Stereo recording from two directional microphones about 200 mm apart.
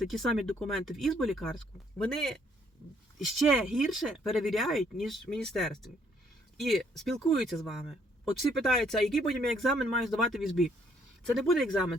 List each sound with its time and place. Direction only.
0.0 s speech: centre (ahead or behind)
8.2 s speech: centre (ahead or behind)